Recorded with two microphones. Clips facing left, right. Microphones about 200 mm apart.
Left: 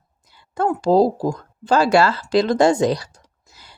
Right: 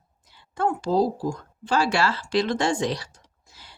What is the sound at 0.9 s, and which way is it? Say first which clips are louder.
Speech: left 7 dB; 90° left.